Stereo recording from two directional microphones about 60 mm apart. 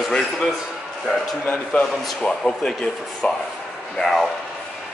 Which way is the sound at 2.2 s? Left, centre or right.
Centre.